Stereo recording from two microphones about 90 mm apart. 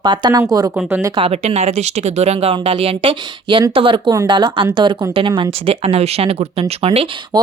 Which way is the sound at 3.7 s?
80° right.